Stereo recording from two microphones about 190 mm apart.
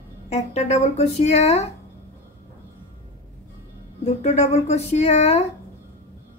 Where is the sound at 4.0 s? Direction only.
35° left (ahead or behind).